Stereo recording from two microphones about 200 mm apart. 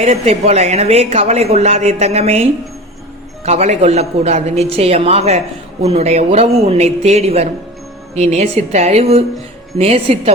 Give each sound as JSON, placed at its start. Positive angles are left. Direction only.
{"t": 0.0, "sound": "a woman's voice", "side_deg": -30}